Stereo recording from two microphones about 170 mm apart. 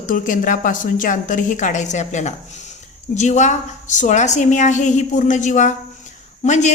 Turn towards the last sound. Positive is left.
turn(degrees=45)  # may be behind; listen again after turning